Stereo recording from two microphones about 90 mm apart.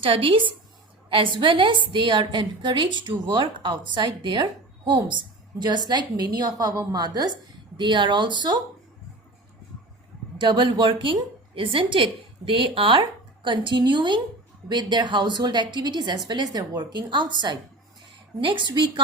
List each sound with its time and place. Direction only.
0.0 s a woman's voice: 85° right; by 4.4 s 60° right (ahead or behind)
5.5 s a woman's voice: 55° right (ahead or behind)
7.8 s a woman's voice: 60° right (ahead or behind)
10.3 s a woman's voice: 60° right (ahead or behind)
11.5 s a woman's voice: 80° right; by 17.6 s 60° right (ahead or behind)
18.3 s a woman's voice: 70° right (ahead or behind)